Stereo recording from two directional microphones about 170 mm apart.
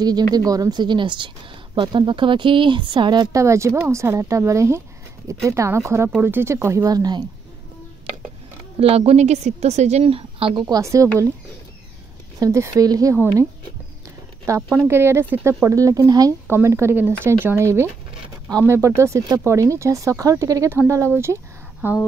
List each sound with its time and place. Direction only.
0.0 s speech: 25° right (ahead or behind)
8.7 s a woman's voice: 35° right (ahead or behind); by 11.2 s 20° right (ahead or behind)
12.4 s speech: 15° right (ahead or behind)